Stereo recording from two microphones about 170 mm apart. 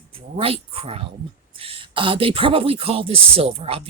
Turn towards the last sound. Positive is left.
turn(degrees=-35)  # may be behind; listen again after turning